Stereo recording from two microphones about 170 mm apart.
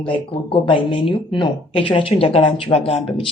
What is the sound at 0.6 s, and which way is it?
Speech, 30° left (ahead or behind).